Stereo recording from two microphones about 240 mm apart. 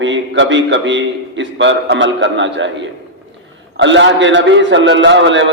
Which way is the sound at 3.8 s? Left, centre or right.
Right.